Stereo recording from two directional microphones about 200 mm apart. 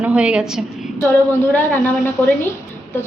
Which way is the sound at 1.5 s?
10° left (ahead or behind).